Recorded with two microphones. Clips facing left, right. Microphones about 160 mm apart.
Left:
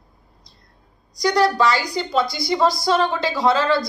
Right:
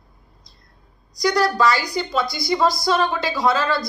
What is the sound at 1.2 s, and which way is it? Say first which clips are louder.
A woman's voice: left 1 dB; 25° left (ahead or behind).